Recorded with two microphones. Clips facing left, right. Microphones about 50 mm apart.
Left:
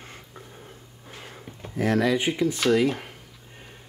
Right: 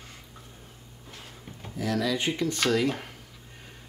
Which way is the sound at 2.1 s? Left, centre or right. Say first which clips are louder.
Left 4 dB; centre.